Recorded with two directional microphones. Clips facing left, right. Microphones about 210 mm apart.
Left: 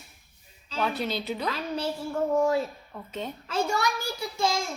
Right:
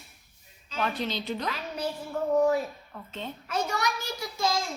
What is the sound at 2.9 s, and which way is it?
Speech, 10° left (ahead or behind).